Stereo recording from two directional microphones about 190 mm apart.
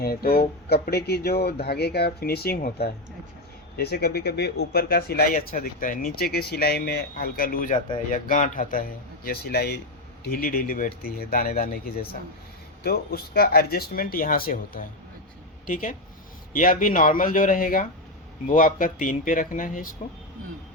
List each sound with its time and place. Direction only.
0.0 s speech: 55° left (ahead or behind)